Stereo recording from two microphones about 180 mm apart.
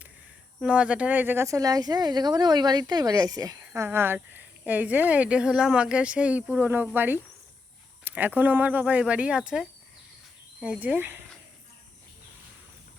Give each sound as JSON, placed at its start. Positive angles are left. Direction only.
{"t": 0.6, "sound": "speech", "side_deg": -5}